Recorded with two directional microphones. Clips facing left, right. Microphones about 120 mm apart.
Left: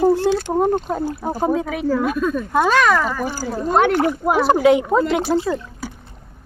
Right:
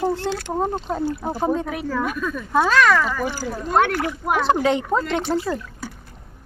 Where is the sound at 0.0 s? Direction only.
10° left (ahead or behind).